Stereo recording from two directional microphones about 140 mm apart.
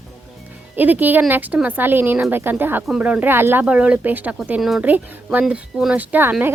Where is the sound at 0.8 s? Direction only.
10° right (ahead or behind).